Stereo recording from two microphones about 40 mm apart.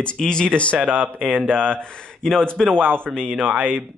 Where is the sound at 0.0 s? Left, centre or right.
Left.